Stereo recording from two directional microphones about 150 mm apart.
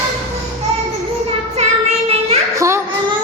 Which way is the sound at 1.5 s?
45° right (ahead or behind).